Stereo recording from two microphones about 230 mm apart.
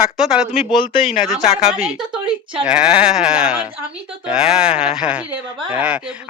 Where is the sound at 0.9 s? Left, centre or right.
Left.